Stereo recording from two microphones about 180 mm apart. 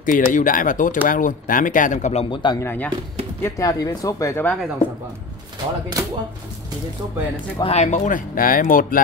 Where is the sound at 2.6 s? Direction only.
10° left (ahead or behind).